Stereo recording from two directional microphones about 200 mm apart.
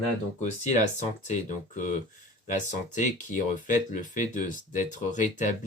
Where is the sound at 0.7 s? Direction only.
35° left (ahead or behind).